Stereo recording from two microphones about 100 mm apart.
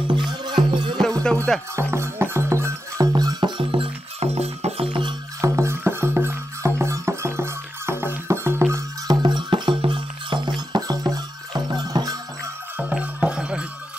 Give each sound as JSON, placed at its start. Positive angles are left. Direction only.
{"t": 0.5, "sound": "music", "side_deg": -50}
{"t": 1.2, "sound": "music", "side_deg": 10}
{"t": 1.8, "sound": "music", "side_deg": -25}
{"t": 4.4, "sound": "music", "side_deg": -90}
{"t": 5.4, "sound": "music", "side_deg": -30}
{"t": 9.0, "sound": "music", "side_deg": -45}
{"t": 12.7, "sound": "music", "side_deg": -15}